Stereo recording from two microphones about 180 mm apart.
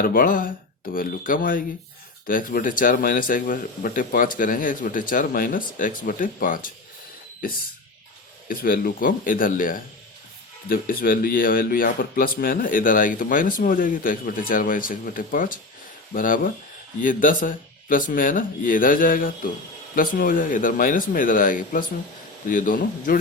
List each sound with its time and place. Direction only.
0.0 s speech: 50° left (ahead or behind)
8.4 s speech: 55° left (ahead or behind)